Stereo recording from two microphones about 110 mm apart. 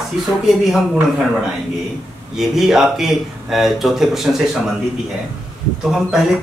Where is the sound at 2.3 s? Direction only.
5° right (ahead or behind).